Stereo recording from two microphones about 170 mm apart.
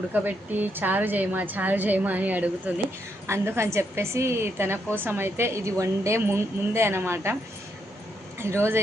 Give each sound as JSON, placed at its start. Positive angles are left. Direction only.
{"t": 0.1, "sound": "a woman's voice", "side_deg": -10}
{"t": 8.4, "sound": "a woman's voice", "side_deg": -15}